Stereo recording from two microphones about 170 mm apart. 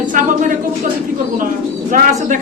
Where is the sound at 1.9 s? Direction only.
50° right (ahead or behind).